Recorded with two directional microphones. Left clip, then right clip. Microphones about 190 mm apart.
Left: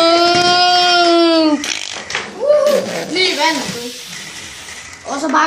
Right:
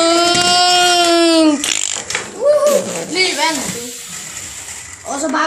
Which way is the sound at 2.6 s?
15° right (ahead or behind).